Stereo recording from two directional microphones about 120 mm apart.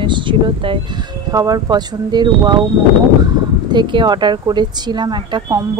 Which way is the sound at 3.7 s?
40° right (ahead or behind).